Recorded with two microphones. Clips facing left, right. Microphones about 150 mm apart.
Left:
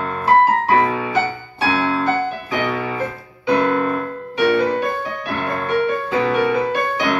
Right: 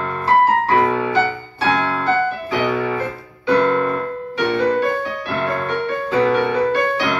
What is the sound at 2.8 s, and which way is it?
Piano, 15° left (ahead or behind).